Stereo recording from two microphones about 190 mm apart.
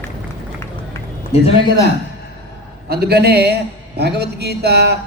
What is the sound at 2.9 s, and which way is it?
Speech, 55° right (ahead or behind).